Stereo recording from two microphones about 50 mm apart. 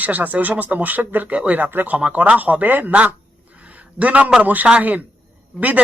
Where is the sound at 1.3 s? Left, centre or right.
Right.